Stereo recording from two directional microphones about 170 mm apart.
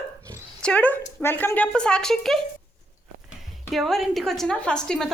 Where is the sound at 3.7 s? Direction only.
Centre (ahead or behind).